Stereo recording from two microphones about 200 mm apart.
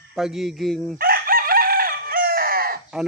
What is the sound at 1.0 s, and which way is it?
Chicken, 45° right (ahead or behind).